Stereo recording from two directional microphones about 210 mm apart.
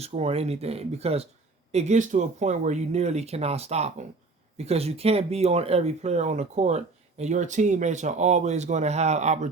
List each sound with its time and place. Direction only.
0.0 s speech: 30° right (ahead or behind)